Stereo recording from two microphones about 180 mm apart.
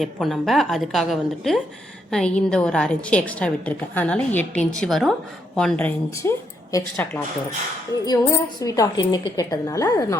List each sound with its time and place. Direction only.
0.0 s a woman's voice: centre (ahead or behind); by 10.2 s 20° left (ahead or behind)